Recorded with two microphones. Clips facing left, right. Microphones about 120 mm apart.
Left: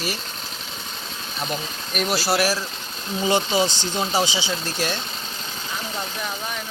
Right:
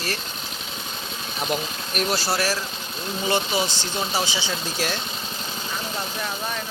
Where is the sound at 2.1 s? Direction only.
10° left (ahead or behind).